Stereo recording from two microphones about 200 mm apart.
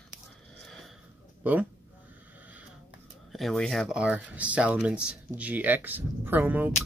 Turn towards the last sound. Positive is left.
turn(degrees=-10)  # may be behind; listen again after turning